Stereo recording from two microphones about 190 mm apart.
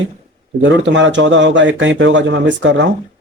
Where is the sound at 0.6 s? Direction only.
75° right (ahead or behind).